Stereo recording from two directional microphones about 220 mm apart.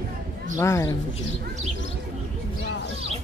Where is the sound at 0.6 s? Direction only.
15° left (ahead or behind).